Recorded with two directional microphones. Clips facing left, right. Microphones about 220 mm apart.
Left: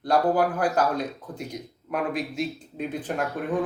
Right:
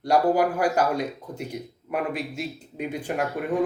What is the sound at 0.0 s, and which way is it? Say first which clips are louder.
Speech: right 1 dB; 10° right (ahead or behind).